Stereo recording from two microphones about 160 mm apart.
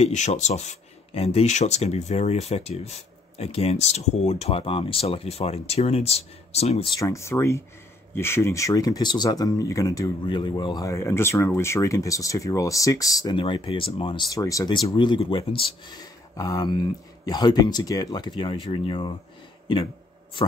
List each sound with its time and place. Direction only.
0.0 s speech: 45° left (ahead or behind)
7.0 s speech: 20° left (ahead or behind)